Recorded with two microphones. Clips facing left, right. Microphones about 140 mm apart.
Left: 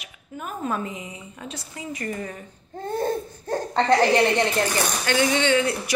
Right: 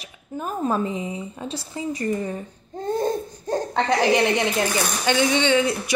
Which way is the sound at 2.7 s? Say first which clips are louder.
Right 2 dB; 20° right (ahead or behind).